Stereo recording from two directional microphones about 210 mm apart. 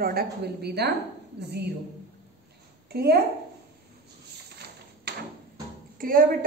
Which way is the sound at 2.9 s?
50° right (ahead or behind).